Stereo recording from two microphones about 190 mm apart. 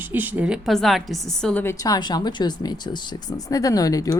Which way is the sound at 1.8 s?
20° left (ahead or behind).